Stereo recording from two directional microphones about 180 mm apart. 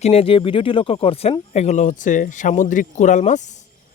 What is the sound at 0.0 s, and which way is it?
Speech, 35° left (ahead or behind).